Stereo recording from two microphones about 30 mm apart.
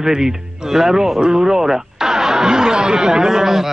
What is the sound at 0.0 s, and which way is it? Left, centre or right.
Speech, centre.